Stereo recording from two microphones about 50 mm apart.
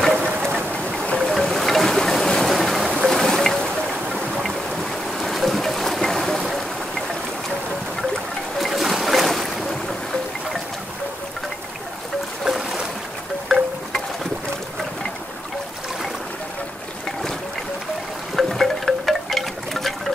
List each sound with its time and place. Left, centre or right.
0.0 s vehicle: centre
1.0 s boat: centre
1.5 s boat: centre
4.1 s a sound: centre
5.2 s boat: centre
8.5 s boat: centre
12.4 s boat: centre
18.3 s wind chime: centre